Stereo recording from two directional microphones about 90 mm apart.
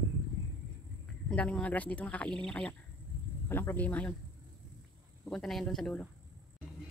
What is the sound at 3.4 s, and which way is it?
Speech, 25° left (ahead or behind).